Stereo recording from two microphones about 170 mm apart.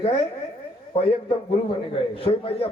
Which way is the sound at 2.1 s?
30° left (ahead or behind).